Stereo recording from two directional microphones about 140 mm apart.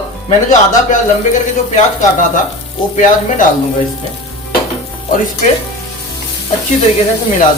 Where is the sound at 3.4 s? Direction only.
65° left (ahead or behind).